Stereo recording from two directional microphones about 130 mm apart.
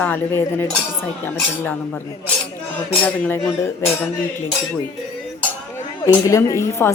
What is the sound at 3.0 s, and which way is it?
Cutlery, 10° left (ahead or behind).